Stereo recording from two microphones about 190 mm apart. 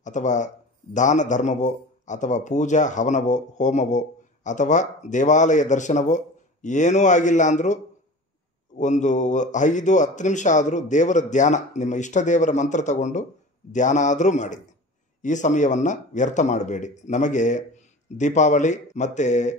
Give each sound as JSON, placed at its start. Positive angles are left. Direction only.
{"t": 0.0, "sound": "a man's voice", "side_deg": 40}